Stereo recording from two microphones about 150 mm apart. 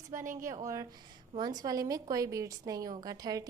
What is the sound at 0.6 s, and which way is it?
A woman's voice, 20° right (ahead or behind).